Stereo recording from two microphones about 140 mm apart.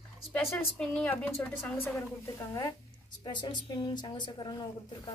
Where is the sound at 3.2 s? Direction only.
30° left (ahead or behind).